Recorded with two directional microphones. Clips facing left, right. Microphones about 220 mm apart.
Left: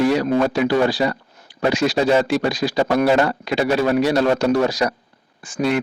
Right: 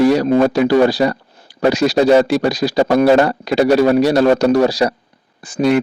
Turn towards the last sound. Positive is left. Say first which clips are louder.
# right 6 dB
turn(degrees=-40)  # may be behind; listen again after turning